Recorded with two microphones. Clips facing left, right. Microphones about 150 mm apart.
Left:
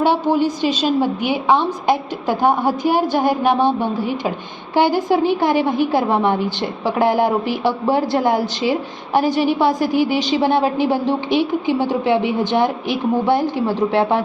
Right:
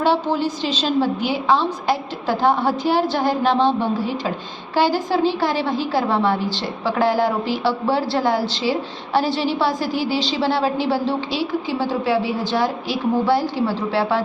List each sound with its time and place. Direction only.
0.0 s a woman's voice: 15° left (ahead or behind)